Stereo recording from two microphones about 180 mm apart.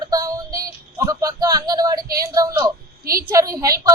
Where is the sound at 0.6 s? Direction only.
20° right (ahead or behind).